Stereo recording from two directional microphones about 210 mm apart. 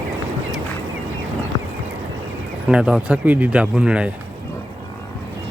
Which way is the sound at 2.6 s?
5° right (ahead or behind).